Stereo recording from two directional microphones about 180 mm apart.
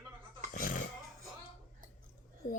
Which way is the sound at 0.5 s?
45° left (ahead or behind).